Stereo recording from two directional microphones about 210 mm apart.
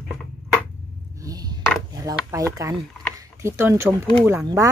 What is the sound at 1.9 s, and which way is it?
Speech, 15° right (ahead or behind).